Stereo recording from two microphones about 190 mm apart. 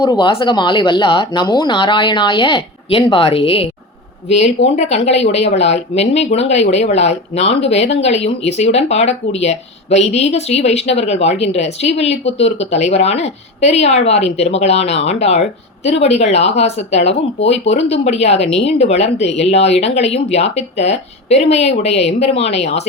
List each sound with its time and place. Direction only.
0.0 s speech: 25° left (ahead or behind)